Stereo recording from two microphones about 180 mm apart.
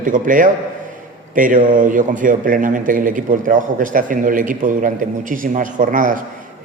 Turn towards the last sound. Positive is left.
turn(degrees=-50)  # may be behind; listen again after turning